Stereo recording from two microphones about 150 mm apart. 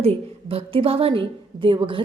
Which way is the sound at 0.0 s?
40° right (ahead or behind).